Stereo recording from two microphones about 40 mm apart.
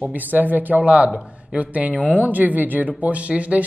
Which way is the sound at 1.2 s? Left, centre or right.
Right.